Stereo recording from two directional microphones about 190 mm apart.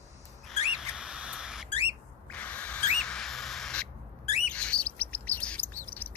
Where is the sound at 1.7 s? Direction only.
30° left (ahead or behind).